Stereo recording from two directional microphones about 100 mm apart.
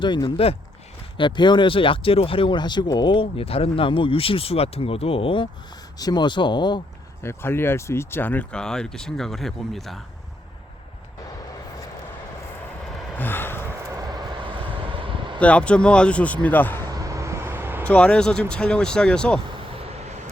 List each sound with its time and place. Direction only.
0.0 s speech: 50° left (ahead or behind)
0.3 s speech: 70° left (ahead or behind)
1.1 s speech: 50° left (ahead or behind)
6.0 s speech: 45° left (ahead or behind)
7.2 s speech: 25° left (ahead or behind)
8.5 s speech: 5° left (ahead or behind)
13.1 s vehicle: 20° left (ahead or behind)
13.9 s vehicle: 45° right (ahead or behind)
15.4 s a man's voice: 10° left (ahead or behind)
16.9 s vehicle: 35° right (ahead or behind)
17.8 s a man's voice: 15° left (ahead or behind)